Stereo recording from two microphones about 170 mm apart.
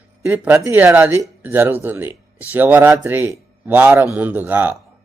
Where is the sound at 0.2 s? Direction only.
10° right (ahead or behind).